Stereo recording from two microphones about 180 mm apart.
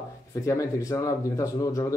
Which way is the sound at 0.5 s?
20° left (ahead or behind).